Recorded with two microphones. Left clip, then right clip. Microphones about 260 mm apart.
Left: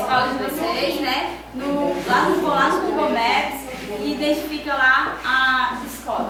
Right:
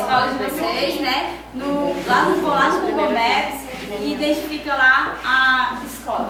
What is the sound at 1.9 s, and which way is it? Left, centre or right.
A capella, centre.